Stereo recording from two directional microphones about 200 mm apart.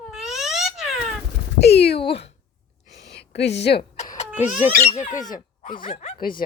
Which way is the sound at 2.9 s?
55° left (ahead or behind).